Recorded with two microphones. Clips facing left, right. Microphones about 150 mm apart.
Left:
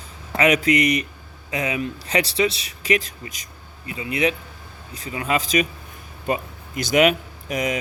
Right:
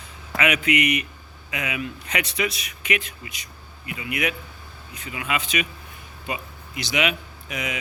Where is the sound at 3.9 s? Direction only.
30° left (ahead or behind).